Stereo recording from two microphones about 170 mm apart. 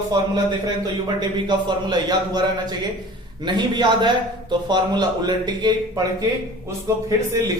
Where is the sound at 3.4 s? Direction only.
25° right (ahead or behind).